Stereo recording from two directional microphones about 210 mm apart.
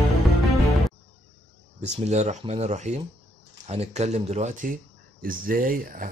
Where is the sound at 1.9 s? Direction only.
30° right (ahead or behind).